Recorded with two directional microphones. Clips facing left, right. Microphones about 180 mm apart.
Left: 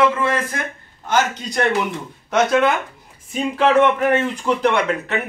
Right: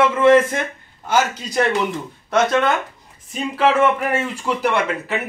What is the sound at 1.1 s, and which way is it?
A man's voice, 5° right (ahead or behind).